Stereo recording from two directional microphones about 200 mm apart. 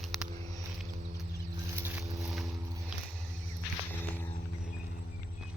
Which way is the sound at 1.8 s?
10° right (ahead or behind).